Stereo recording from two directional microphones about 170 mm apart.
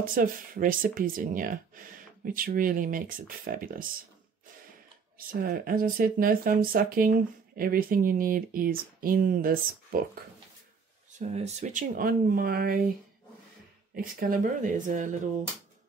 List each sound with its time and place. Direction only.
0.0 s speech: 55° right (ahead or behind)
5.1 s speech: 55° right (ahead or behind)
11.1 s speech: 40° right (ahead or behind); by 12.8 s 60° right (ahead or behind)
13.9 s speech: 55° right (ahead or behind)